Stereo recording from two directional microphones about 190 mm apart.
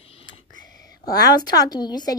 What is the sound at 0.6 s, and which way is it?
A woman's voice, 20° left (ahead or behind).